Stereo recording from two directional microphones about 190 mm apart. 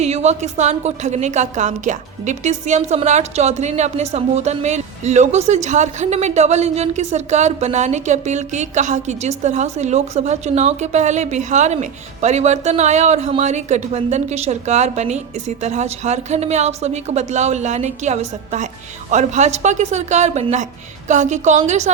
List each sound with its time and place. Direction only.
0.0 s a woman's voice: 35° right (ahead or behind)